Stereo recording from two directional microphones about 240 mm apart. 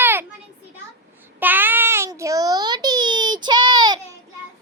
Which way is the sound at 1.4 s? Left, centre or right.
Centre.